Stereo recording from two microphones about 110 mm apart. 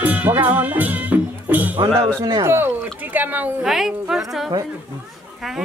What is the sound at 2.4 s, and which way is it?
A woman's voice, 20° right (ahead or behind).